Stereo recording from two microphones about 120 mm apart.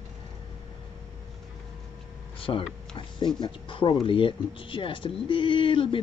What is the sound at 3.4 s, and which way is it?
Speech, 45° left (ahead or behind).